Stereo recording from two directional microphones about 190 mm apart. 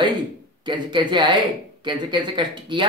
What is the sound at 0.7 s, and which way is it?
Speech, 25° right (ahead or behind).